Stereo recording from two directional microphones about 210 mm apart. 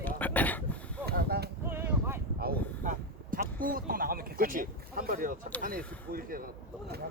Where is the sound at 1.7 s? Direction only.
10° right (ahead or behind).